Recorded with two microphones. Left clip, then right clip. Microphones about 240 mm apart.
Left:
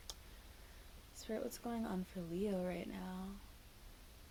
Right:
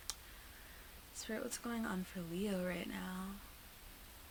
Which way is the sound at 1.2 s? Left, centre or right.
Right.